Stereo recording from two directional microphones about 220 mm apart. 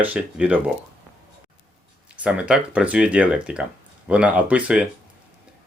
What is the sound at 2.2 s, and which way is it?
Speech, 5° right (ahead or behind).